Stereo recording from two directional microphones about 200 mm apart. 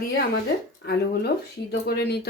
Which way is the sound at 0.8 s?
55° left (ahead or behind).